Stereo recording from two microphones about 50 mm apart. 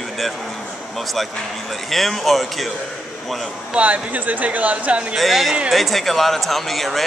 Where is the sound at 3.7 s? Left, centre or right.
Right.